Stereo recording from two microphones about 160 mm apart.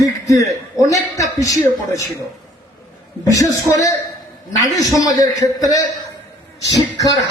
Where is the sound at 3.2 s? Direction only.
20° left (ahead or behind).